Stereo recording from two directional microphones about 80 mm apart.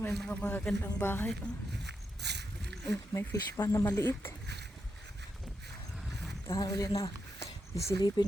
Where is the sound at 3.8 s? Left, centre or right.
Left.